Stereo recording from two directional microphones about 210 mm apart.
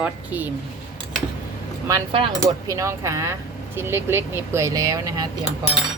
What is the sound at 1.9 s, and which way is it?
Speech, 15° right (ahead or behind).